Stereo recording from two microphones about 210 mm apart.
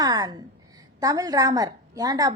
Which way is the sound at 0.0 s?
20° right (ahead or behind).